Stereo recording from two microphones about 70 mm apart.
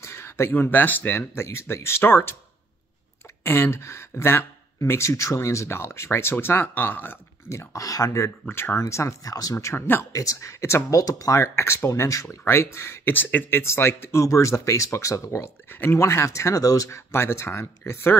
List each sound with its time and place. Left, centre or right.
0.0 s a sound: left
0.5 s speech: left
3.4 s speech: left
7.5 s speech: left
8.5 s speech: left
9.3 s speech: left
11.0 s speech: left
14.2 s speech: left
17.1 s speech: left